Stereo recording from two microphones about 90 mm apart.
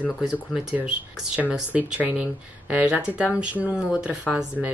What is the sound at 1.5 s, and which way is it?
Speech, 15° right (ahead or behind).